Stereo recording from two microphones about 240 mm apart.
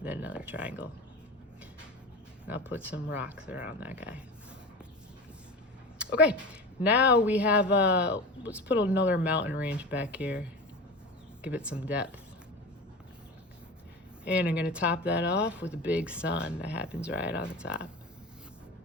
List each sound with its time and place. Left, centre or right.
0.0 s a sound: centre
2.5 s a woman's voice: centre
6.0 s a woman's voice: centre
11.4 s a woman's voice: centre
14.3 s a woman's voice: centre
17.2 s speech: left
17.5 s a woman's voice: centre